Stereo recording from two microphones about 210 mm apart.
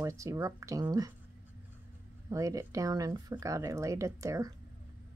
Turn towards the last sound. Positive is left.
turn(degrees=-15)  # may be behind; listen again after turning